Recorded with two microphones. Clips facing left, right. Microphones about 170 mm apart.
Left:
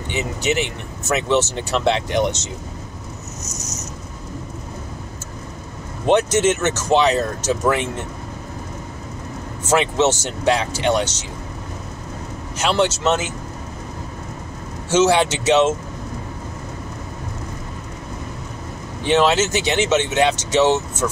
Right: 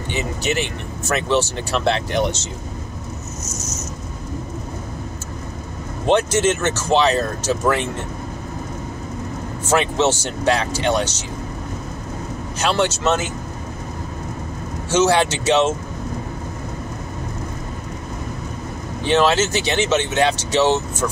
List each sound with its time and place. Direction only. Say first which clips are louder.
0.1 s speech: left 1 dB; 20° left (ahead or behind)
6.0 s speech: left 1 dB; 20° left (ahead or behind)
9.8 s speech: left 1 dB; 20° left (ahead or behind)
12.6 s speech: left 1 dB; 20° left (ahead or behind)
14.9 s speech: left 1 dB; 20° left (ahead or behind)
19.0 s speech: even; 20° left (ahead or behind)